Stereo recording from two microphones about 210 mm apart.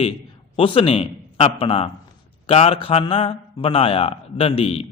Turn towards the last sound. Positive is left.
turn(degrees=30)  # may be behind; listen again after turning